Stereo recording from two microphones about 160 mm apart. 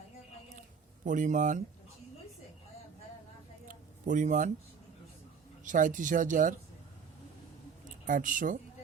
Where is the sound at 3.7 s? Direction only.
50° right (ahead or behind).